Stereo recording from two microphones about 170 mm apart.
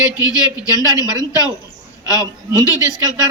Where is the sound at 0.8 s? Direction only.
20° left (ahead or behind).